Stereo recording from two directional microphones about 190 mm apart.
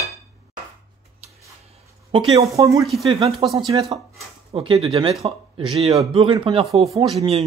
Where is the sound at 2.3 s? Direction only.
15° right (ahead or behind).